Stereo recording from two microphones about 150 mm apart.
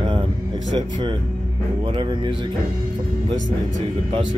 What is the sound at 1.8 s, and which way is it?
Speech, 30° right (ahead or behind).